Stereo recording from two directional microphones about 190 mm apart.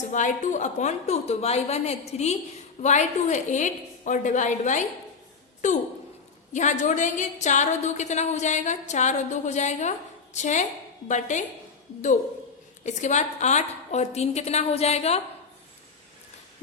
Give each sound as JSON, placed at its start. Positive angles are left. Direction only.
{"t": 0.1, "sound": "a woman's voice", "side_deg": 40}
{"t": 6.5, "sound": "a woman's voice", "side_deg": 40}
{"t": 12.8, "sound": "a woman's voice", "side_deg": 40}